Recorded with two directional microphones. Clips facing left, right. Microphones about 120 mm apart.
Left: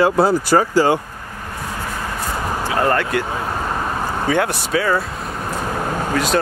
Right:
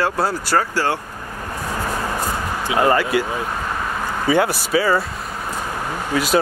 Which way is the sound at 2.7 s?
5° right (ahead or behind).